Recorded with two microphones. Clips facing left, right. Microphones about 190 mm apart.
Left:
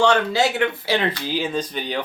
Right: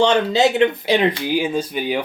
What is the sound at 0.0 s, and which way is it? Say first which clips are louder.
A man's voice: right 3 dB; 20° right (ahead or behind).